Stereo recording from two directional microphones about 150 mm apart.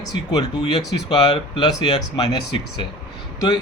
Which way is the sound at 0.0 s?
30° left (ahead or behind).